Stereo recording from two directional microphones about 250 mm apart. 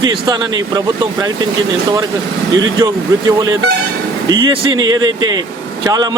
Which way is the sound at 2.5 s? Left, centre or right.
Centre.